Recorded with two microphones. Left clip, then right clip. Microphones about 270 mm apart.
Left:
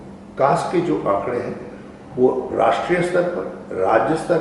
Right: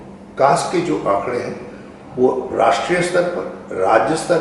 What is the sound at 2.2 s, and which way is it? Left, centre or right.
Speech, left.